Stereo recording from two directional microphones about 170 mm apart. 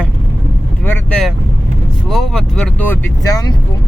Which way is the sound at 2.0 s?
Centre (ahead or behind).